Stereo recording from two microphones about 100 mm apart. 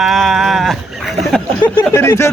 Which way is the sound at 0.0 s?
Centre (ahead or behind).